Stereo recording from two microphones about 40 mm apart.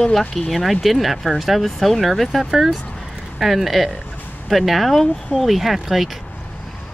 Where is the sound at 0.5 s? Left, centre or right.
Centre.